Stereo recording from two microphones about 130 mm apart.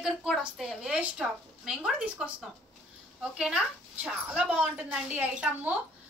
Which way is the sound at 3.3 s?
5° right (ahead or behind).